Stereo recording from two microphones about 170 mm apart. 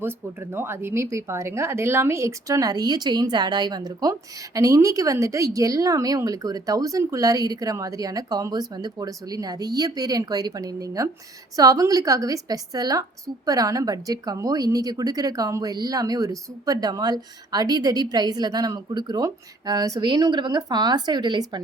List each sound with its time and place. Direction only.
0.0 s speech: 15° right (ahead or behind)